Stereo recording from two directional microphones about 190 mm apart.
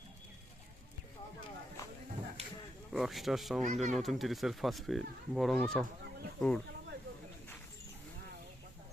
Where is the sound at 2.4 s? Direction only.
35° right (ahead or behind).